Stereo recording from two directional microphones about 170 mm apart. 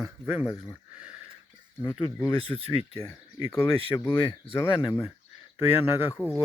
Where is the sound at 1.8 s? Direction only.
30° left (ahead or behind).